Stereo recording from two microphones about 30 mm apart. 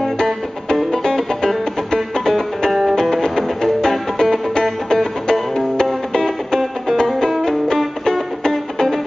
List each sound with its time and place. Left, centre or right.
0.0 s music: centre
2.7 s music: centre
3.0 s music: centre
4.9 s music: centre
7.4 s music: centre